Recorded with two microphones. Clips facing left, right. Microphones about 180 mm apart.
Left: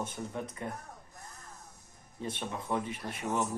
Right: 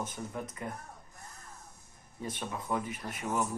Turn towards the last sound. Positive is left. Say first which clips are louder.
# even
turn(degrees=35)  # may be behind; listen again after turning